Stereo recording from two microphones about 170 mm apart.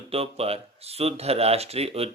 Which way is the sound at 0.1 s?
35° right (ahead or behind).